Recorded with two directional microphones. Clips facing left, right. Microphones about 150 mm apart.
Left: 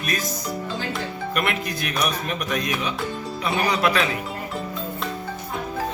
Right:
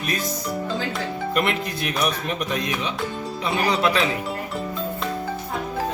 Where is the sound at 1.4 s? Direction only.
25° right (ahead or behind).